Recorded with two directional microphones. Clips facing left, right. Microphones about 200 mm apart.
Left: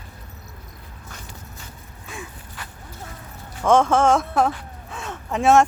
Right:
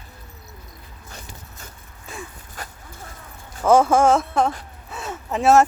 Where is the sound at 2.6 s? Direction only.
40° right (ahead or behind).